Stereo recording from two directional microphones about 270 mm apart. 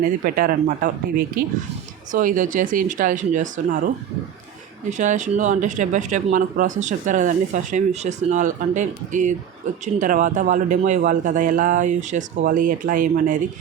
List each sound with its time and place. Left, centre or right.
0.0 s speech: right
4.9 s speech: right